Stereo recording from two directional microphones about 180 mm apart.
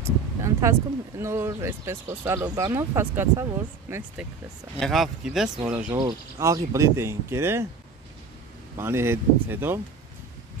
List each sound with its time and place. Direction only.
0.0 s speech: 15° right (ahead or behind)
4.7 s speech: centre (ahead or behind)
5.9 s speech: 20° right (ahead or behind)
8.7 s speech: 15° right (ahead or behind)